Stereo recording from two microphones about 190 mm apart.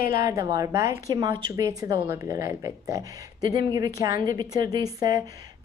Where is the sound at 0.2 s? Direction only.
15° right (ahead or behind).